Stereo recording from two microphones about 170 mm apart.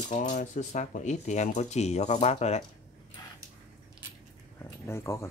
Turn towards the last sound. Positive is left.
turn(degrees=15)  # may be behind; listen again after turning